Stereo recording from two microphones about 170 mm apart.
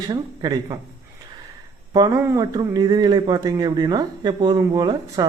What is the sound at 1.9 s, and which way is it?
Speech, 20° right (ahead or behind).